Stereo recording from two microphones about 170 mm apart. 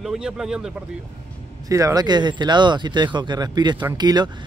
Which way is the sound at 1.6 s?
20° right (ahead or behind).